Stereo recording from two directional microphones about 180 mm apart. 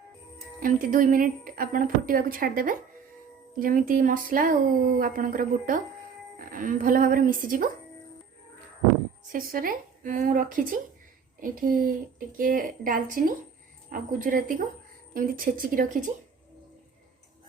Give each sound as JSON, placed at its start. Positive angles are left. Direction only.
{"t": 0.6, "sound": "speech", "side_deg": -50}
{"t": 9.3, "sound": "speech", "side_deg": -55}